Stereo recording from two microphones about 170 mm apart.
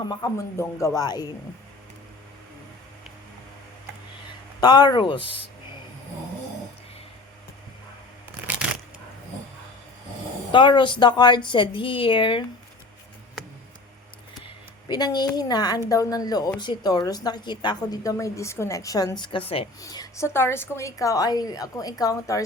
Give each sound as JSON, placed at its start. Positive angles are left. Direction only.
{"t": 0.0, "sound": "a woman's voice", "side_deg": 25}
{"t": 4.6, "sound": "a woman's voice", "side_deg": 25}
{"t": 10.5, "sound": "a woman's voice", "side_deg": 30}
{"t": 14.8, "sound": "a woman's voice", "side_deg": 25}
{"t": 19.8, "sound": "a woman's voice", "side_deg": 20}